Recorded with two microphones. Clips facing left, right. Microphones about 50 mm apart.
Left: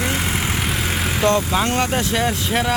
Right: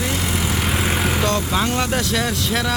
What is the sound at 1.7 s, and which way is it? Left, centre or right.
Speech, left.